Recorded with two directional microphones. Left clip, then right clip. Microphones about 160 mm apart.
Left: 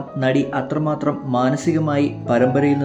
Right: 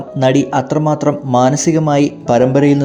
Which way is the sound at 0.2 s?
35° right (ahead or behind).